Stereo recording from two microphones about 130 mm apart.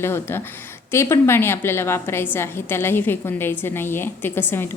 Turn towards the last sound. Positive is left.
turn(degrees=15)  # may be behind; listen again after turning